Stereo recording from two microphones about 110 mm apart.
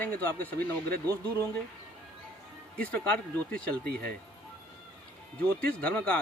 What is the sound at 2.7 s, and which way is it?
Speech, 10° left (ahead or behind).